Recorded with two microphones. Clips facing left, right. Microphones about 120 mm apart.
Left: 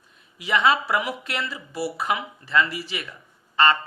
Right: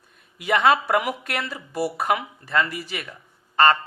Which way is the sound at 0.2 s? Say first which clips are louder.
Right 2 dB; 50° right (ahead or behind).